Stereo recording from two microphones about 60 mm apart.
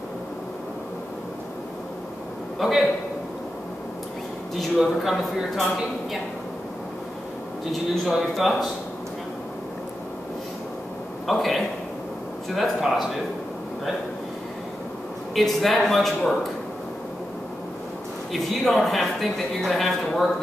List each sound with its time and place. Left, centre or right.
2.6 s speech: centre
4.6 s speech: centre
7.9 s speech: centre
11.2 s speech: centre
15.3 s speech: centre
18.3 s speech: centre